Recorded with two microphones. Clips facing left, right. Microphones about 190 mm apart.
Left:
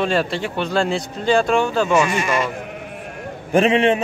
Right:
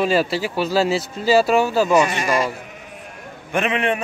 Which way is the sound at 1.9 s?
35° right (ahead or behind).